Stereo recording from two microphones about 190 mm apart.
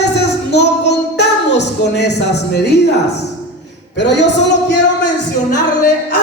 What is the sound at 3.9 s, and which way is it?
Speech, 65° left (ahead or behind).